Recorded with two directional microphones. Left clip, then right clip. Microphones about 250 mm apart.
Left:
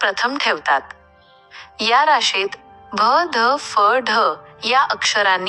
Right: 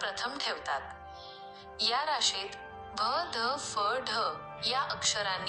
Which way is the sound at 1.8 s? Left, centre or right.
Left.